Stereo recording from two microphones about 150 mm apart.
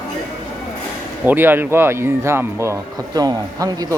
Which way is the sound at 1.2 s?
10° right (ahead or behind).